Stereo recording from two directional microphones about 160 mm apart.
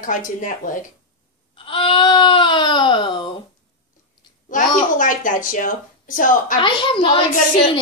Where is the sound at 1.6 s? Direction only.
35° left (ahead or behind).